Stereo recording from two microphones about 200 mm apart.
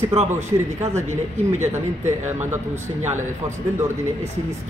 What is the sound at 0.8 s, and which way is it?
Speech, 35° right (ahead or behind).